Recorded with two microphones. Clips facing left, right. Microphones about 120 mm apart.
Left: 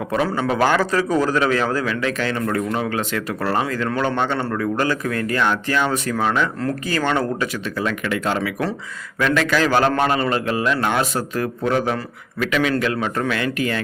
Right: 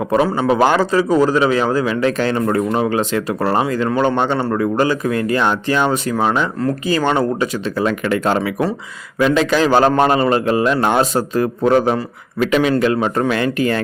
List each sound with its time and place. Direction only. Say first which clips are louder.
0.1 s a man's voice: right 5 dB; 20° right (ahead or behind)
2.0 s speech: right 6 dB; 35° right (ahead or behind)
8.4 s speech: right 4 dB; 25° right (ahead or behind)